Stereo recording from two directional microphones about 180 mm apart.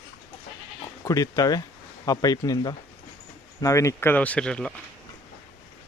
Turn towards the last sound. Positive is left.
turn(degrees=5)  # may be behind; listen again after turning